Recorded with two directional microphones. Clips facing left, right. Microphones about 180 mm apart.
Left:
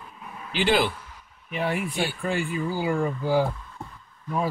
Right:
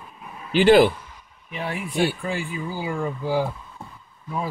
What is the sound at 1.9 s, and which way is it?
Speech, centre (ahead or behind).